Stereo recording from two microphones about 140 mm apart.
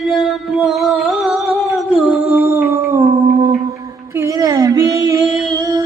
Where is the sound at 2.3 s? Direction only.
20° right (ahead or behind).